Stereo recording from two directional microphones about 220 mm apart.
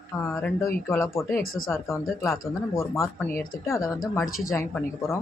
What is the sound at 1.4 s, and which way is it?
Speech, 40° left (ahead or behind).